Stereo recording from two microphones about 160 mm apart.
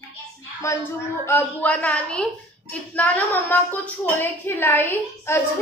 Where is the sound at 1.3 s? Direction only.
10° left (ahead or behind).